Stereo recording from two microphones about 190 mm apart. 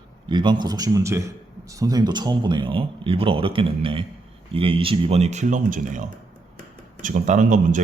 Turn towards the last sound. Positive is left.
turn(degrees=-40)  # may be behind; listen again after turning